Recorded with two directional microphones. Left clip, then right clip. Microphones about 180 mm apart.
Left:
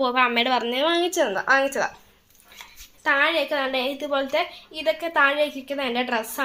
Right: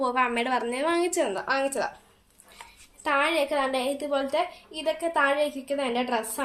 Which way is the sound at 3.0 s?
15° left (ahead or behind).